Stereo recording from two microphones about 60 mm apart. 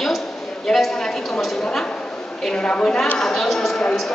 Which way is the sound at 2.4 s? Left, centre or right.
Centre.